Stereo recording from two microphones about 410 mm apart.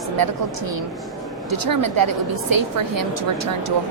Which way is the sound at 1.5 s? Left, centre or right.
Right.